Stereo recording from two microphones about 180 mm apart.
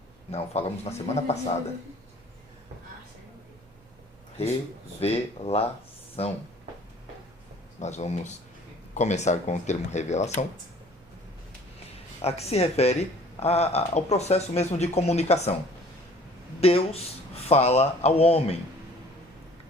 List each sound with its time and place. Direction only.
0.3 s speech: 35° left (ahead or behind)
4.9 s speech: 35° left (ahead or behind)
7.8 s speech: 40° left (ahead or behind)
12.2 s speech: 35° left (ahead or behind)
16.6 s speech: 35° left (ahead or behind)